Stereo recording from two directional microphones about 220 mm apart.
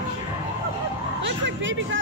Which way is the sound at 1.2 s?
55° right (ahead or behind).